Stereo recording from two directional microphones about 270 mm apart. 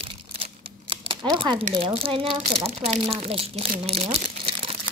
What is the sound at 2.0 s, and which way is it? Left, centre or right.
Speech, centre.